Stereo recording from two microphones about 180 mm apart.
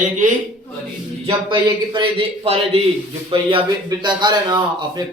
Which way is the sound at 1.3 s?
25° right (ahead or behind).